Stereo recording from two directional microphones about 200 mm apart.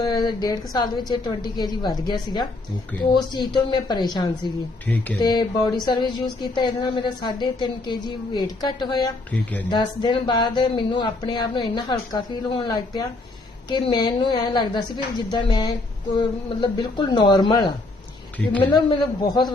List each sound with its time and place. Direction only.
0.0 s speech: 20° left (ahead or behind)
4.9 s speech: 5° left (ahead or behind)
5.2 s speech: 20° left (ahead or behind)
9.3 s speech: 10° left (ahead or behind)
9.6 s speech: 20° left (ahead or behind)
18.3 s speech: 10° left (ahead or behind)
18.7 s speech: 20° left (ahead or behind)